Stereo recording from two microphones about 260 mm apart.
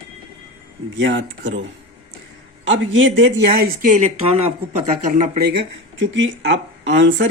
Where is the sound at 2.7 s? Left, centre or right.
Right.